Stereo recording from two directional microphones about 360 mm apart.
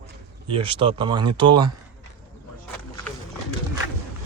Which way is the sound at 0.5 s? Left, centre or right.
Centre.